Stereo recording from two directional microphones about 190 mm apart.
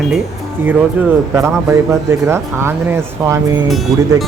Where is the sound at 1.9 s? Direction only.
15° right (ahead or behind).